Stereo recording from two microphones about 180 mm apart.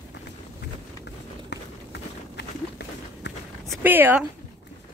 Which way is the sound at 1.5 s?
70° left (ahead or behind).